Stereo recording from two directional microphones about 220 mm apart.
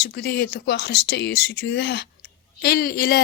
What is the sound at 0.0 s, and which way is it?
Speech, 50° left (ahead or behind).